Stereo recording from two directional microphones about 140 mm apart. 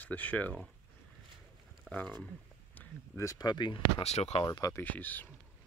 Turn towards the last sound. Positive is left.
turn(degrees=15)  # may be behind; listen again after turning